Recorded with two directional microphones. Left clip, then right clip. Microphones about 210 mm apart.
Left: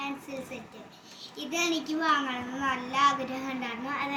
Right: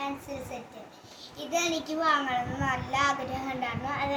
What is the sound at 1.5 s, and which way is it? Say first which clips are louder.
A child's voice: right 1 dB; 15° right (ahead or behind).